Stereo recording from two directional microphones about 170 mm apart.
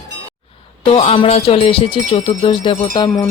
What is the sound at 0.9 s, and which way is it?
Speech, 35° left (ahead or behind).